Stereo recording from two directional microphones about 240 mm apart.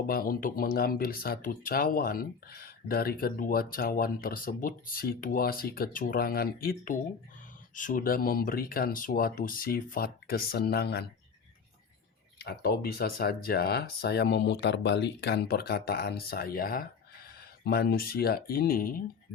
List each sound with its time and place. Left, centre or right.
0.1 s speech: left
12.4 s speech: left